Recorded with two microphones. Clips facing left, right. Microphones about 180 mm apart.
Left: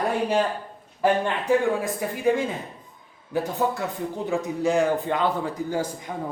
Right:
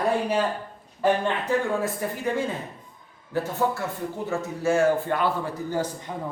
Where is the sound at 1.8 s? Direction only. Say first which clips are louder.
Left 3 dB; 15° left (ahead or behind).